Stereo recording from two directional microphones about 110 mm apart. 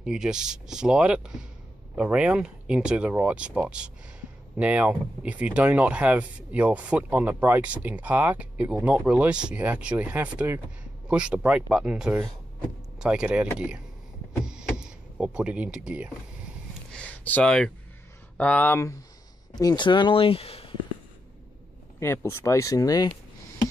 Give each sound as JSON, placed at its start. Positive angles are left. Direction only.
{"t": 0.0, "sound": "speech", "side_deg": -5}
{"t": 14.4, "sound": "a sound", "side_deg": -5}
{"t": 14.8, "sound": "speech", "side_deg": -10}
{"t": 16.9, "sound": "speech", "side_deg": 15}
{"t": 19.5, "sound": "speech", "side_deg": 40}
{"t": 22.0, "sound": "speech", "side_deg": 25}